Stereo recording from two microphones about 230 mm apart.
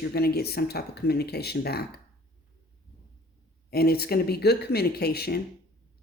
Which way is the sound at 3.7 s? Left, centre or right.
Left.